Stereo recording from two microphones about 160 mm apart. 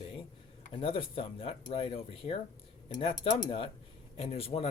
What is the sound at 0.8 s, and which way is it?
Speech, 35° left (ahead or behind).